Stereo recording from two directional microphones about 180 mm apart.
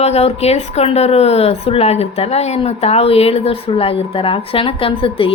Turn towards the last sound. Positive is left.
turn(degrees=30)  # may be behind; listen again after turning